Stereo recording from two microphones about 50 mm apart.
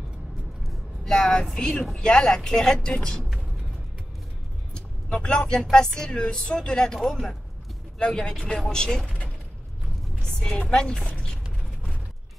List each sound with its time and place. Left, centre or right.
0.7 s a woman's voice: centre
4.7 s speech: centre
6.9 s speech: centre; by 9.3 s left
10.2 s music: centre
10.6 s speech: centre
11.1 s a sound: centre